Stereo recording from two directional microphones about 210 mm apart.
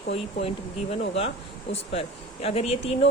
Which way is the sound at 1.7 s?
30° left (ahead or behind).